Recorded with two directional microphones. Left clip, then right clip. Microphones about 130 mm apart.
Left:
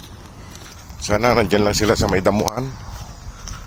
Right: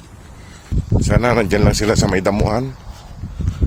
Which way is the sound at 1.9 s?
90° right.